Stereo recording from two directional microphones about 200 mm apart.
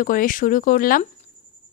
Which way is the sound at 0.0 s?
45° left (ahead or behind).